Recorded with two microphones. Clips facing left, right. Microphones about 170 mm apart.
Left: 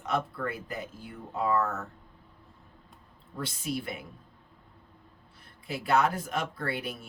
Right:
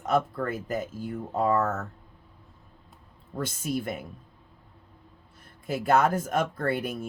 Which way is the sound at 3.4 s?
45° right (ahead or behind).